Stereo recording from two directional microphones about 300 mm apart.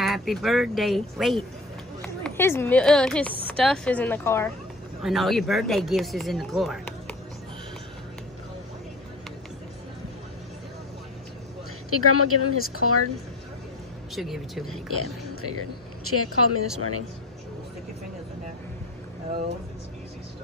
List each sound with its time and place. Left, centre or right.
0.0 s speech: centre
11.9 s speech: left
14.1 s speech: centre
14.7 s speech: left